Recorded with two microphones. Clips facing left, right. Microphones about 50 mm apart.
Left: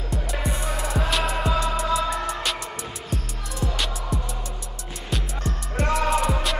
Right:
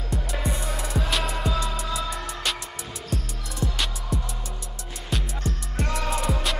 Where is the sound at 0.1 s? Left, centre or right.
Centre.